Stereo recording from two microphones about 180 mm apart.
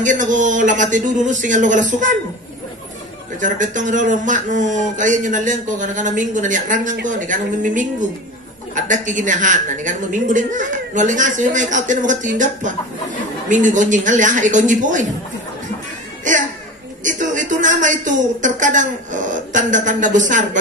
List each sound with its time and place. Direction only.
0.0 s a woman's voice: 45° right (ahead or behind)
3.3 s a woman's voice: 45° right (ahead or behind)
16.3 s music: 45° right (ahead or behind)
17.0 s speech: 45° right (ahead or behind)